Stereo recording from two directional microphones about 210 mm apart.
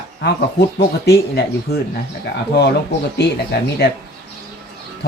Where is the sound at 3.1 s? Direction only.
50° left (ahead or behind).